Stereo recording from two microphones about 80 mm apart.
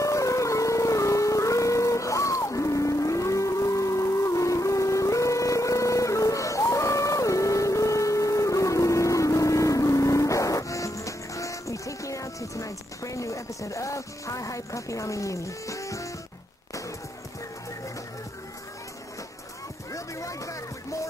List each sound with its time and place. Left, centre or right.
0.0 s howl: left
19.9 s music: left